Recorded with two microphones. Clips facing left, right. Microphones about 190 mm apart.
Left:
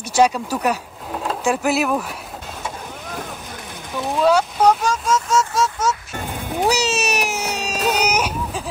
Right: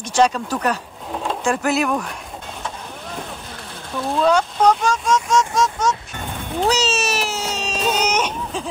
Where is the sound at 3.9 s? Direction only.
15° left (ahead or behind).